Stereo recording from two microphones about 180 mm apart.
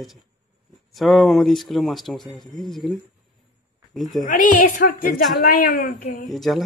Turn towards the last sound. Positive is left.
turn(degrees=0)  # may be behind; listen again after turning